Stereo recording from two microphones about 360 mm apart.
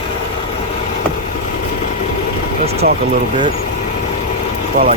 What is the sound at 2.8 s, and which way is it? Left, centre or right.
Speech, right.